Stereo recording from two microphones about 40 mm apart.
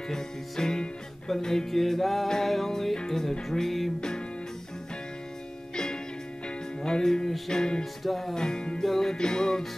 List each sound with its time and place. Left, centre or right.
0.1 s music: centre
1.7 s music: centre
6.8 s music: centre
7.8 s music: centre
8.4 s music: centre
8.8 s music: centre